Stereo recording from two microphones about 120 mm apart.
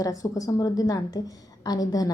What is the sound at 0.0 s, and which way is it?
A woman's voice, 30° left (ahead or behind).